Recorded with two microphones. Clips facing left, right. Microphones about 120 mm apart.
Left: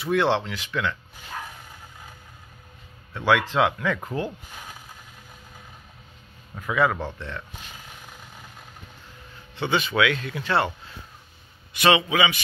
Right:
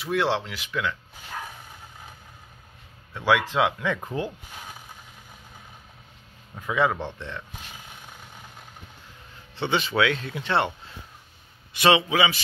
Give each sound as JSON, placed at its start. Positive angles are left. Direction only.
{"t": 0.0, "sound": "speech", "side_deg": -5}
{"t": 3.2, "sound": "speech", "side_deg": -15}
{"t": 6.6, "sound": "speech", "side_deg": -20}
{"t": 9.6, "sound": "speech", "side_deg": -25}
{"t": 11.7, "sound": "speech", "side_deg": -25}